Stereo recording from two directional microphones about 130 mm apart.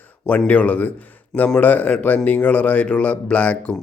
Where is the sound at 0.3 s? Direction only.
10° left (ahead or behind).